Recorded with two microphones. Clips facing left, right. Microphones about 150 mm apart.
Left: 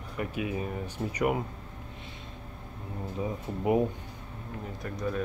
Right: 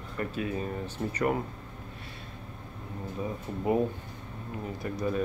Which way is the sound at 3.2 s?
15° left (ahead or behind).